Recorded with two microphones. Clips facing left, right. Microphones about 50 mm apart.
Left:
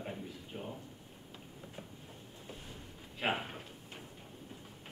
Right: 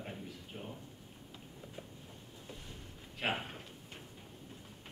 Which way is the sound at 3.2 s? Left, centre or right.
Centre.